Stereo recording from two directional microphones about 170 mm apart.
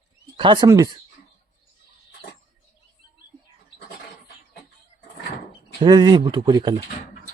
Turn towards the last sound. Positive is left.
turn(degrees=-25)  # may be behind; listen again after turning